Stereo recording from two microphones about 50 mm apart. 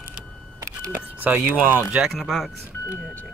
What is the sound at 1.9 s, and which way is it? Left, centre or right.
Speech, centre.